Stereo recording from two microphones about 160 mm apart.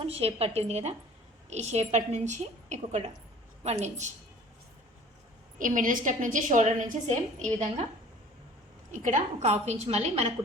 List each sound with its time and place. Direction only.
0.0 s a woman's voice: 40° right (ahead or behind)
5.5 s a woman's voice: 55° right (ahead or behind)
9.0 s a woman's voice: 50° right (ahead or behind)